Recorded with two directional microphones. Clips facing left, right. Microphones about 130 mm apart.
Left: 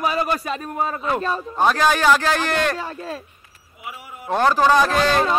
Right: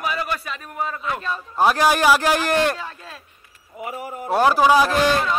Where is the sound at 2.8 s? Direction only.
40° left (ahead or behind).